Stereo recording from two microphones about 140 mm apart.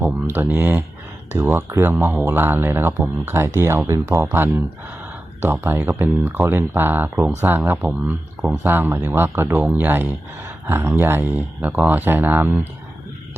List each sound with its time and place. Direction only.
0.0 s speech: 15° right (ahead or behind)